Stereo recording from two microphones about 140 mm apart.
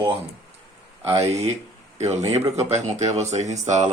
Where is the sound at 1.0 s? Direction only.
20° right (ahead or behind).